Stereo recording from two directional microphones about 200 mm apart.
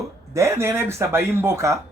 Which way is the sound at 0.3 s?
15° right (ahead or behind).